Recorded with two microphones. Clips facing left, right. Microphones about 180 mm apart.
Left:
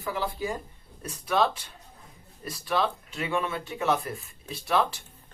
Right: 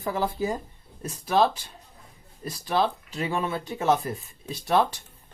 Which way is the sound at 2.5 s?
30° right (ahead or behind).